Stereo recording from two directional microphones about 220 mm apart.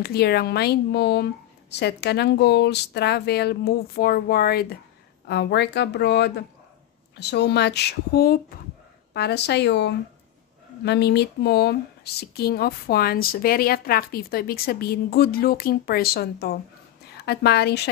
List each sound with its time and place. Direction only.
0.0 s speech: 45° left (ahead or behind)